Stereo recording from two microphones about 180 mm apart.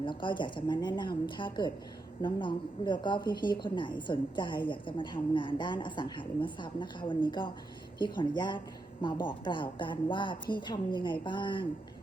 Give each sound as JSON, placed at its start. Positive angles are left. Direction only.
{"t": 0.0, "sound": "speech", "side_deg": 25}